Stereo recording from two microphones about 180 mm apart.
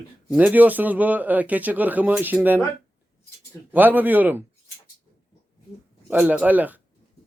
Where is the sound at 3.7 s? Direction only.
10° right (ahead or behind).